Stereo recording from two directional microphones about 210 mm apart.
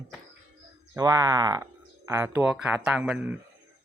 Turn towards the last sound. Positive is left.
turn(degrees=-10)  # may be behind; listen again after turning